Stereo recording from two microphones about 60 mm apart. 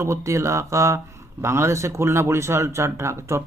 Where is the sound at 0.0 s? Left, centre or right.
Right.